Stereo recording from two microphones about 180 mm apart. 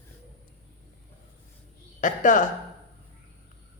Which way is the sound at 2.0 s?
45° left (ahead or behind).